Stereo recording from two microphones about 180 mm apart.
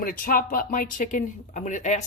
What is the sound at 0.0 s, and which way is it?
Speech, 50° left (ahead or behind).